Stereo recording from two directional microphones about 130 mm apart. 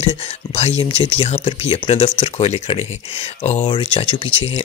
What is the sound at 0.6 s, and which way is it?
Speech, 55° left (ahead or behind).